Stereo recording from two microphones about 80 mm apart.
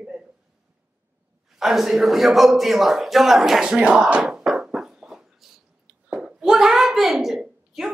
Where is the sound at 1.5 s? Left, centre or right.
Centre.